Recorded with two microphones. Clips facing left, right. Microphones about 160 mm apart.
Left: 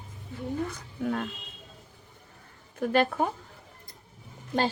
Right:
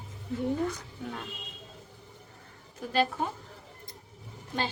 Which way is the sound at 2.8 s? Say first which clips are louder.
Left 4 dB; 60° left (ahead or behind).